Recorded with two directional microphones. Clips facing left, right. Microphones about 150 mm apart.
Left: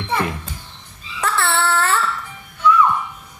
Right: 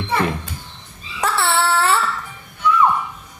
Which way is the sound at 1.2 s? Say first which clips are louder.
Right 1 dB; 15° right (ahead or behind).